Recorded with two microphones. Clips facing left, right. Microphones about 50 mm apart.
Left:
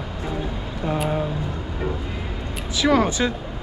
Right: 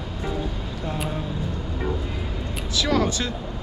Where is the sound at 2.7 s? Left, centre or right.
Left.